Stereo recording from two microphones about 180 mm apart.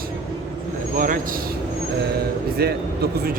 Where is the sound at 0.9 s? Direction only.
50° right (ahead or behind).